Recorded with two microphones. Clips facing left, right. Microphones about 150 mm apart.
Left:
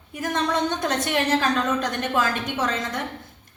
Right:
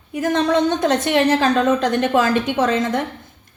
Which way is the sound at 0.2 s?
50° right (ahead or behind).